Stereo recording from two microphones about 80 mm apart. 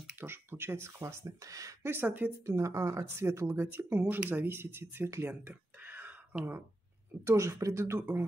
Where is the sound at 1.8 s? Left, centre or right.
Right.